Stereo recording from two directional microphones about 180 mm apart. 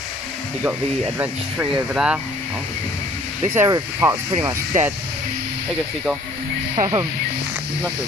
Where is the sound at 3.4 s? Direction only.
15° right (ahead or behind).